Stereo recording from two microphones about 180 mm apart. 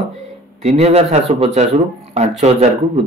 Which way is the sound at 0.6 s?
35° right (ahead or behind).